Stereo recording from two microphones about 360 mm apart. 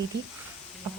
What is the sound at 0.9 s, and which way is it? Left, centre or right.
Insect, right.